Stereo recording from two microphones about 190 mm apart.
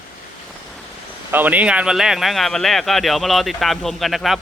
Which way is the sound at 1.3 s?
10° right (ahead or behind).